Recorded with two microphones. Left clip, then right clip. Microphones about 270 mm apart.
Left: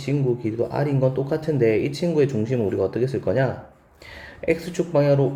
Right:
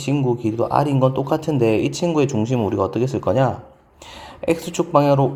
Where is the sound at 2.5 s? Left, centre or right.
Right.